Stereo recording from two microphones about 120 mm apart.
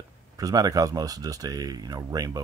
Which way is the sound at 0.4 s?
30° right (ahead or behind).